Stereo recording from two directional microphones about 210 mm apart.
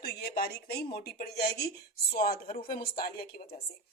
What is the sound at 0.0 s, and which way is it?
A woman's voice, 50° left (ahead or behind).